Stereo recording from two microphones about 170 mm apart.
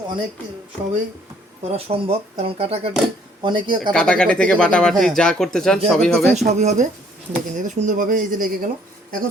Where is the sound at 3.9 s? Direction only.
5° left (ahead or behind).